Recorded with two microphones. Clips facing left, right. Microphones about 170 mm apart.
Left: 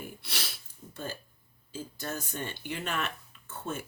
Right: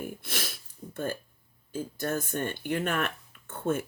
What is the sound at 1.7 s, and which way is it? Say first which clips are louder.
Speech: right 6 dB; 55° right (ahead or behind).